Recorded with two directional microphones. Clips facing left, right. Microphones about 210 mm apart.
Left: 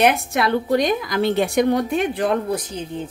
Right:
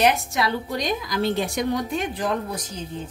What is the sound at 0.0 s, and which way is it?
A woman's voice, 60° left (ahead or behind).